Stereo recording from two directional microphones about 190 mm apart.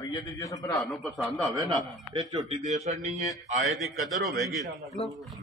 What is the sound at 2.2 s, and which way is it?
Speech, 20° right (ahead or behind).